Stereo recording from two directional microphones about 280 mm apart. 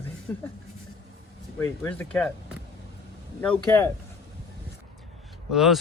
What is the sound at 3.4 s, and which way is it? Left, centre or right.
Speech, centre.